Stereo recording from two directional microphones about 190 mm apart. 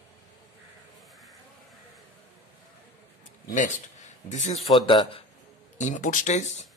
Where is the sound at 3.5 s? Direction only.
40° left (ahead or behind).